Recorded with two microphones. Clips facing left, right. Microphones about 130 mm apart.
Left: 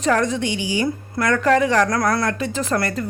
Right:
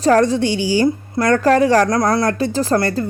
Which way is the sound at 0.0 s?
35° right (ahead or behind).